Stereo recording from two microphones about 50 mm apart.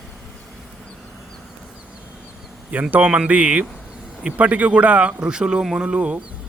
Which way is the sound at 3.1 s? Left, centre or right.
Right.